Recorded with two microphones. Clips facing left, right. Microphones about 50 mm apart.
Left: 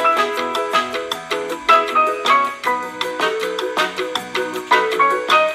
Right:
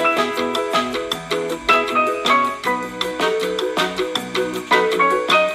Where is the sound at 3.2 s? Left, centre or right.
Left.